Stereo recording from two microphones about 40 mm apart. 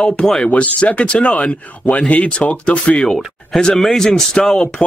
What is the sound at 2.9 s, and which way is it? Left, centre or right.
Speech, centre.